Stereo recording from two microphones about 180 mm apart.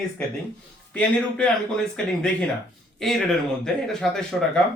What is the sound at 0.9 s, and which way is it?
Speech, 5° left (ahead or behind).